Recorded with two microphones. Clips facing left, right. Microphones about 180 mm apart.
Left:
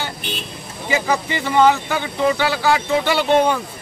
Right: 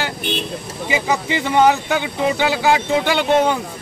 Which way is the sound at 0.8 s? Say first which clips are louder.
Even; 15° right (ahead or behind).